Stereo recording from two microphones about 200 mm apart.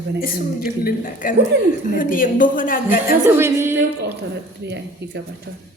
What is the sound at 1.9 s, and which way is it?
Speech, 45° left (ahead or behind).